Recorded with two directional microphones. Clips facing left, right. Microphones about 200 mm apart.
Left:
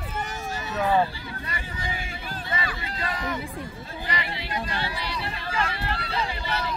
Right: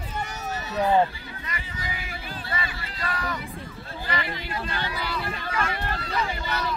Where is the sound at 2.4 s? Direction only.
20° left (ahead or behind).